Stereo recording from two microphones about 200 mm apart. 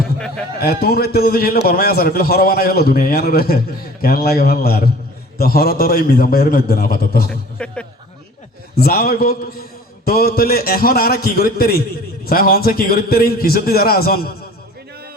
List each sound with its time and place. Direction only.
0.6 s a man's voice: 50° left (ahead or behind)
7.3 s a man's voice: 5° left (ahead or behind)
8.7 s a man's voice: 50° left (ahead or behind)